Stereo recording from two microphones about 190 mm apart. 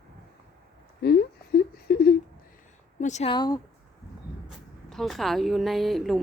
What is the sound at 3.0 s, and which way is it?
Speech, 35° left (ahead or behind).